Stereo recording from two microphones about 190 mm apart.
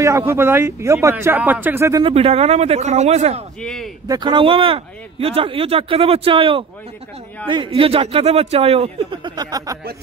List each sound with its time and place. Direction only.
0.3 s speech: 10° right (ahead or behind)
2.0 s speech: 30° right (ahead or behind)
3.6 s speech: 5° left (ahead or behind)
4.1 s speech: 25° right (ahead or behind)